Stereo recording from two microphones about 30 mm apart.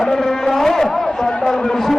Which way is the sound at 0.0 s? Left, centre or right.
Centre.